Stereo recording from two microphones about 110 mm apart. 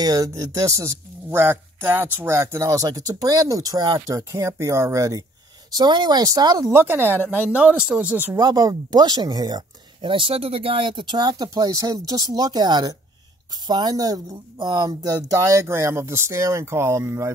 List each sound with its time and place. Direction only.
0.0 s speech: 35° right (ahead or behind)
4.2 s speech: 25° right (ahead or behind)
5.7 s speech: 40° right (ahead or behind)
6.7 s speech: 20° right (ahead or behind)
8.4 s speech: 35° right (ahead or behind)